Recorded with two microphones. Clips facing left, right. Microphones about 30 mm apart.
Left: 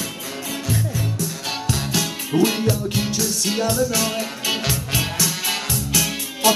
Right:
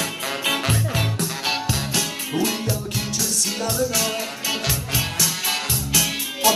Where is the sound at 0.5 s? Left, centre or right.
Right.